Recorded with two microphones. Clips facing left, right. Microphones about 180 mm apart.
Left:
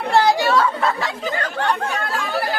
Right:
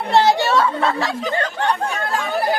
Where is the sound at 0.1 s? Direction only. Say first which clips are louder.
Right 1 dB; 25° right (ahead or behind).